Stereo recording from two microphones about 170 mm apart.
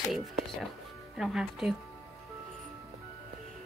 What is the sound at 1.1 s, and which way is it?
Speech, 5° right (ahead or behind).